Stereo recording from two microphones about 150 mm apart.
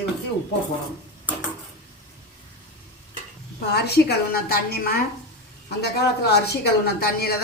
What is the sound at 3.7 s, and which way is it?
A woman's voice, 90° left.